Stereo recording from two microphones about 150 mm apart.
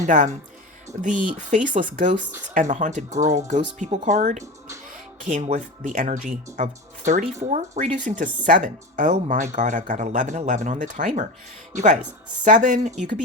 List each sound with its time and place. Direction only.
0.0 s speech: 55° right (ahead or behind)